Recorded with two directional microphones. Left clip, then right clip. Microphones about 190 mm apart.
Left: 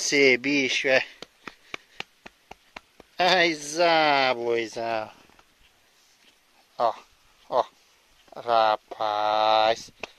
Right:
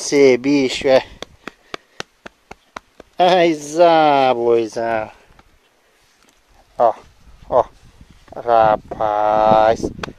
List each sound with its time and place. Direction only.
0.0 s speech: 15° right (ahead or behind)
2.0 s a sound: 5° right (ahead or behind)
3.2 s speech: 25° right (ahead or behind)
4.7 s speech: 5° right (ahead or behind)
6.8 s a sound: 10° right (ahead or behind)
8.3 s speech: 15° right (ahead or behind)